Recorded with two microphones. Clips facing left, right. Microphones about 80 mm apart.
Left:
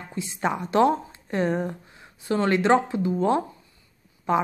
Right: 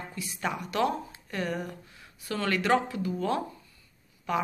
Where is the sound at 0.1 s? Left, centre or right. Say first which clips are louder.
Left 8 dB; left.